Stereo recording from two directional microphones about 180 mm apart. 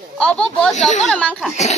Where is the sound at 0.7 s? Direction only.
40° left (ahead or behind).